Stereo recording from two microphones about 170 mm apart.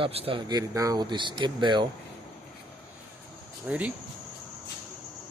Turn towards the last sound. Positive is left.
turn(degrees=-10)  # may be behind; listen again after turning